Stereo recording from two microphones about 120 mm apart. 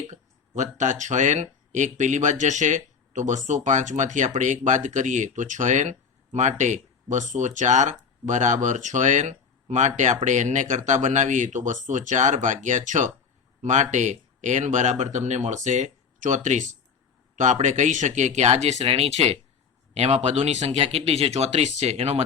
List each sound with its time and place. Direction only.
0.1 s speech: 85° right; by 22.2 s 60° right (ahead or behind)